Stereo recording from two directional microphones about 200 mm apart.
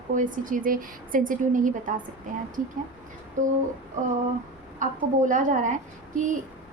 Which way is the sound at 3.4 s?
40° right (ahead or behind).